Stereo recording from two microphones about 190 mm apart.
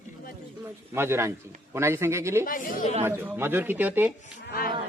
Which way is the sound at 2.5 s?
45° left (ahead or behind).